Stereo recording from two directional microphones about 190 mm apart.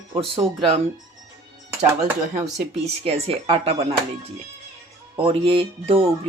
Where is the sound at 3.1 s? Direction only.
30° right (ahead or behind).